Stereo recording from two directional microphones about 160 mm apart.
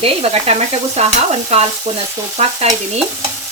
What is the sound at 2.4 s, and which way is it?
Frying, 45° right (ahead or behind).